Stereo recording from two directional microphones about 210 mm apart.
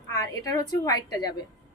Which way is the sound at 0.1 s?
15° left (ahead or behind).